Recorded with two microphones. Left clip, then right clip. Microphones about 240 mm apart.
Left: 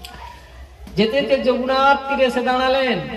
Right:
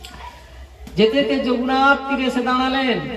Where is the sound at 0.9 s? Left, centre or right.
Left.